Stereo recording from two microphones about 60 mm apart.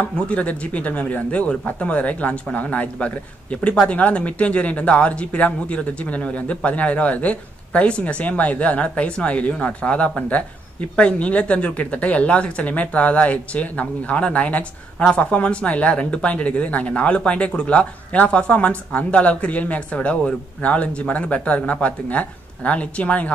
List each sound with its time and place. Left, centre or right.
0.0 s speech: left